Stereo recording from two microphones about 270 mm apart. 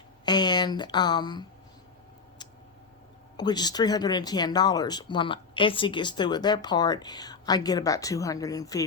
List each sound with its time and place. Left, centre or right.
0.3 s speech: centre
3.3 s speech: centre